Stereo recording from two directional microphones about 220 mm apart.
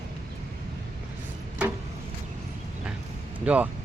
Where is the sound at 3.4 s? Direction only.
5° right (ahead or behind).